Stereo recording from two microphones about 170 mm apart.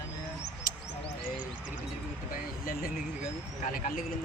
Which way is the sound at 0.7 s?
55° left (ahead or behind).